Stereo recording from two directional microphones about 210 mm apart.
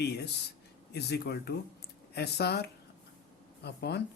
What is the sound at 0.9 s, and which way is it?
Speech, 50° left (ahead or behind).